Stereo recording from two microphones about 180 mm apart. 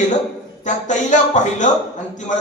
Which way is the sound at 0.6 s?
45° left (ahead or behind).